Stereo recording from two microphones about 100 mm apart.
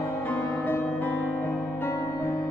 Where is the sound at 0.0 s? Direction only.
25° left (ahead or behind).